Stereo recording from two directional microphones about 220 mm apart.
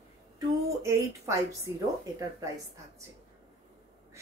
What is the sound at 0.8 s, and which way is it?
Speech, 10° right (ahead or behind).